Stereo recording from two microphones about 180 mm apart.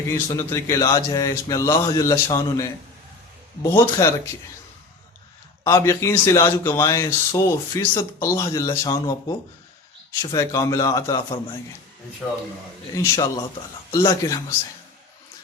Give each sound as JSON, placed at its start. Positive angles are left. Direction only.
{"t": 0.1, "sound": "speech", "side_deg": 15}
{"t": 5.6, "sound": "speech", "side_deg": 15}
{"t": 12.9, "sound": "speech", "side_deg": 15}